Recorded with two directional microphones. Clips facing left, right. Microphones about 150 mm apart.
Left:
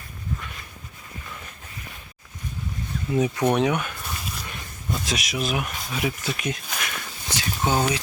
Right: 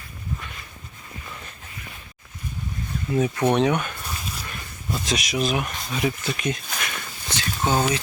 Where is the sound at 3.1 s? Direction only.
15° left (ahead or behind).